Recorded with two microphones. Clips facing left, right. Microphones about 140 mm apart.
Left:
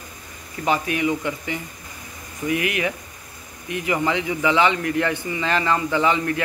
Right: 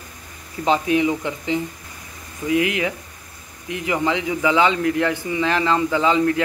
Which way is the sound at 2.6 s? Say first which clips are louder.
Right 2 dB; 20° right (ahead or behind).